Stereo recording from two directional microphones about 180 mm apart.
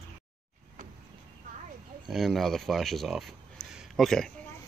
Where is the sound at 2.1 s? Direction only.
Centre (ahead or behind).